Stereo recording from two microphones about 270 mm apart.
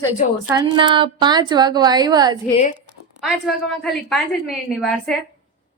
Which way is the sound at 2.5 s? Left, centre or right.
Left.